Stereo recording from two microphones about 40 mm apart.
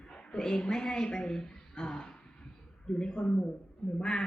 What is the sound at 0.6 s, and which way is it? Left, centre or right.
A woman's voice, centre.